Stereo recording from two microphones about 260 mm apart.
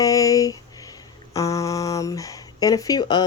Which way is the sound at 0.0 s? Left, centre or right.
Centre.